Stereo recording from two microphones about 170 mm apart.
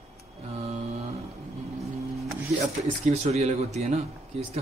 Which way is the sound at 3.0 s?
40° right (ahead or behind).